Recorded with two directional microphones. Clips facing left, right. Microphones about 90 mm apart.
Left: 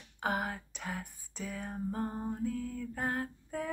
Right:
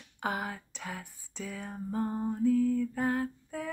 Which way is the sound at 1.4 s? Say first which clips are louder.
Left 1 dB; 25° left (ahead or behind).